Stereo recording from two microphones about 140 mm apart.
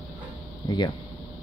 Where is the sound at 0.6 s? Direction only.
30° left (ahead or behind).